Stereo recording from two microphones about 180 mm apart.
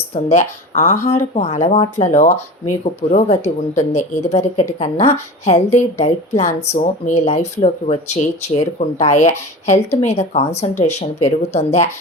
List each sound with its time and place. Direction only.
0.1 s speech: 40° left (ahead or behind)